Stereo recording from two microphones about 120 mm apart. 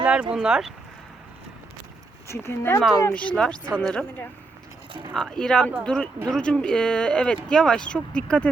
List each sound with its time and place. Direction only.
0.0 s speech: 10° right (ahead or behind)
2.2 s speech: 25° left (ahead or behind)
3.1 s speech: 10° left (ahead or behind)